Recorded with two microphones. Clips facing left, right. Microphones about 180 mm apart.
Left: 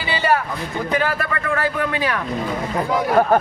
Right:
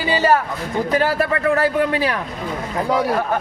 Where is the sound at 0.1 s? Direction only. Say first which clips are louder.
Right 3 dB; 40° right (ahead or behind).